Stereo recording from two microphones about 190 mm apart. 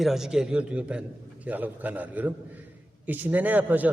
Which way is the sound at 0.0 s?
Centre (ahead or behind).